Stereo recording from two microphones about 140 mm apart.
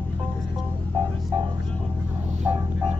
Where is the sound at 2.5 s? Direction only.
15° right (ahead or behind).